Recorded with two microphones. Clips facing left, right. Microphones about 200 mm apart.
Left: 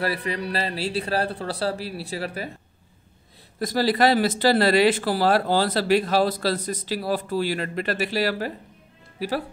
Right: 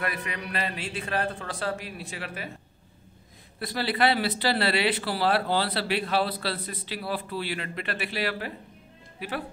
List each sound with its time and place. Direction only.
0.0 s a man's voice: 30° left (ahead or behind)
3.5 s speech: 40° left (ahead or behind)